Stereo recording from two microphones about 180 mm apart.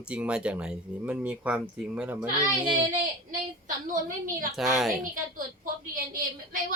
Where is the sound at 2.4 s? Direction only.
25° right (ahead or behind).